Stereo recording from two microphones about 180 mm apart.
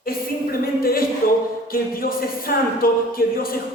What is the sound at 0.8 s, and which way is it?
A woman's voice, 55° left (ahead or behind).